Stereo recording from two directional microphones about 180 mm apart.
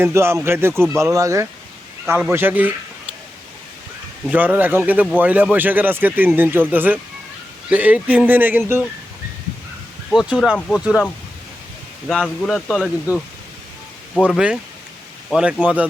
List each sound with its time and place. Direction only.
0.0 s speech: 15° right (ahead or behind)
4.3 s speech: 10° right (ahead or behind)
10.1 s speech: centre (ahead or behind)
14.3 s speech: 5° right (ahead or behind)